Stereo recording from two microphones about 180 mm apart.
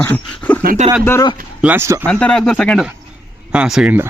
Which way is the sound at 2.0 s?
5° left (ahead or behind).